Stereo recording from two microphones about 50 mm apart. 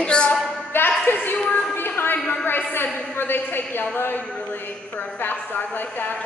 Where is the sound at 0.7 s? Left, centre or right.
Left.